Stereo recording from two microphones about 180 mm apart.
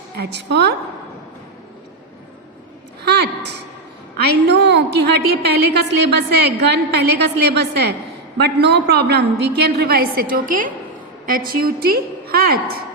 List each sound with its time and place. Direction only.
0.2 s a woman's voice: 70° right (ahead or behind)
3.0 s a sound: 65° right (ahead or behind)
4.4 s a woman's voice: 70° right (ahead or behind)